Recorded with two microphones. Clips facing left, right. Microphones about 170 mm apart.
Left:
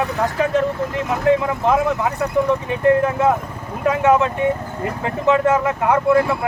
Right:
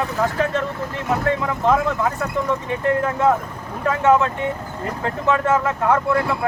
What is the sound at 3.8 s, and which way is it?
Speech, 15° left (ahead or behind).